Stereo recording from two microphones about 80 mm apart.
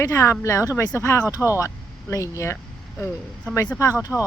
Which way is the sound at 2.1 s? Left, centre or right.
Left.